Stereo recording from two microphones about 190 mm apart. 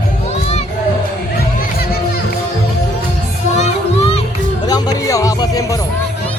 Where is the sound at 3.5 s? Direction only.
35° left (ahead or behind).